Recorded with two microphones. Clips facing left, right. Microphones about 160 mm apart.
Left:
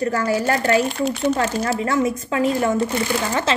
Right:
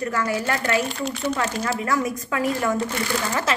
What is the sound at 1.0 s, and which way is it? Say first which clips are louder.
Speech: left 6 dB; 55° left (ahead or behind).